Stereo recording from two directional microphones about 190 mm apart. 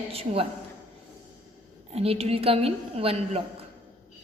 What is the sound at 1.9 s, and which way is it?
A woman's voice, 30° right (ahead or behind).